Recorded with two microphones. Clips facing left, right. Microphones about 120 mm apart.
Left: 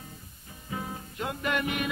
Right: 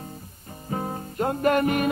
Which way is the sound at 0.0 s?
45° right (ahead or behind).